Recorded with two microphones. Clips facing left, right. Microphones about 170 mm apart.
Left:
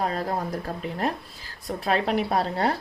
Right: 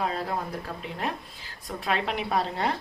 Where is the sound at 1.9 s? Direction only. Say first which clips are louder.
Left 4 dB; 40° left (ahead or behind).